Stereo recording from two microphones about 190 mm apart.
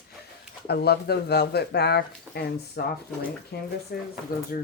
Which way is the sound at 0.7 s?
60° left (ahead or behind).